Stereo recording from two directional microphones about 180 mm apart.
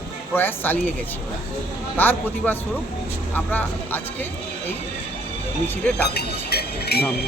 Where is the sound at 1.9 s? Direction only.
10° left (ahead or behind).